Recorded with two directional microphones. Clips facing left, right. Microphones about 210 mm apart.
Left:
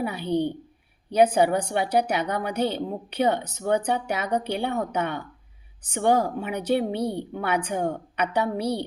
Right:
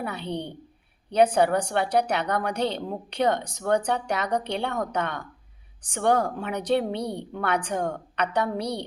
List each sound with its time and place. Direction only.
0.0 s a woman's voice: 10° left (ahead or behind)